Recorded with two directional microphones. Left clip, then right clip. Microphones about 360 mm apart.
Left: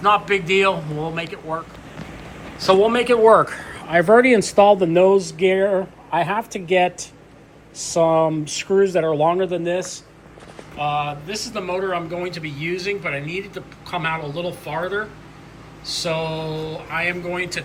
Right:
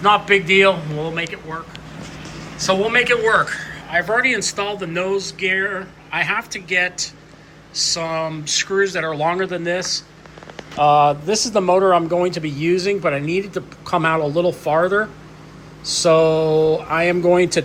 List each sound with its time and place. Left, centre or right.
0.0 s speech: centre
6.1 s speech: centre
10.8 s speech: centre